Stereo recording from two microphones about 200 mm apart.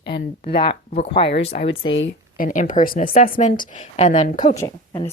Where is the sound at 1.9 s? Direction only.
70° left (ahead or behind).